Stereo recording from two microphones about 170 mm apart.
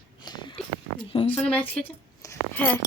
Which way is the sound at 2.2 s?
15° left (ahead or behind).